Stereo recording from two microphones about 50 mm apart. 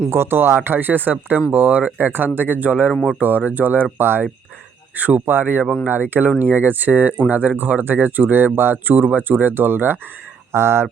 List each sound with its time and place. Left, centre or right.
0.1 s speech: right
3.9 s speech: right
4.9 s speech: right
10.5 s speech: right